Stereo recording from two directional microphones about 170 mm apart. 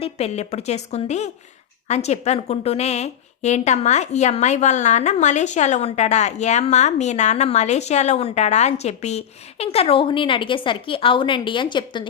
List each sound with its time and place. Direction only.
0.0 s a woman's voice: 40° left (ahead or behind)